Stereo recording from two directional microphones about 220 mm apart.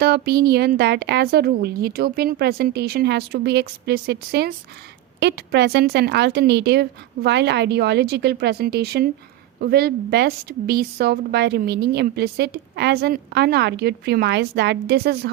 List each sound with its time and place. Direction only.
0.0 s a woman's voice: 45° right (ahead or behind)